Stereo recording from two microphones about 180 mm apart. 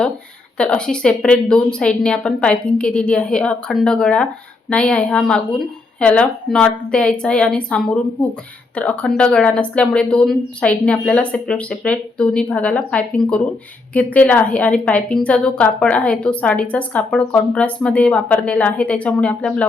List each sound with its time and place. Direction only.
0.6 s a woman's voice: 5° left (ahead or behind)